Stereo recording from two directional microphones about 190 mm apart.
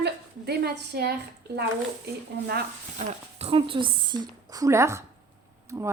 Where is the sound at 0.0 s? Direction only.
60° right (ahead or behind).